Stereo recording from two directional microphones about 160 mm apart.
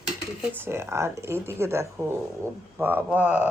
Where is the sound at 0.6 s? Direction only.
15° right (ahead or behind).